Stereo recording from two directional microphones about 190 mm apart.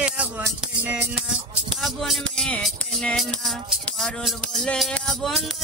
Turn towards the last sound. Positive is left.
turn(degrees=0)  # may be behind; listen again after turning